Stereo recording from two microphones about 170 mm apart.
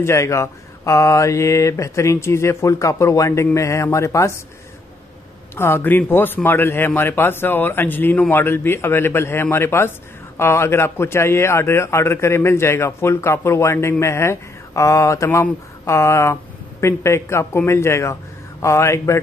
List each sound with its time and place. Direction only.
0.0 s a man's voice: 15° left (ahead or behind)
5.6 s a man's voice: 15° left (ahead or behind)